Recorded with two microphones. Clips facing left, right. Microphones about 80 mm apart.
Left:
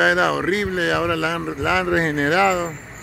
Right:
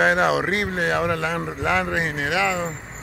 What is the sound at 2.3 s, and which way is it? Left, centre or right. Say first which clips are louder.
Speech: left 5 dB; left.